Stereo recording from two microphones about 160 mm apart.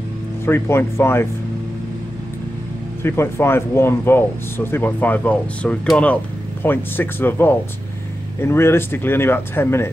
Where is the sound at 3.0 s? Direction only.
15° left (ahead or behind).